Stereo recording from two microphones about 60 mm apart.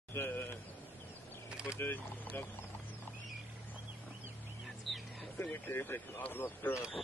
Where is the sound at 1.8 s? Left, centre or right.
Left.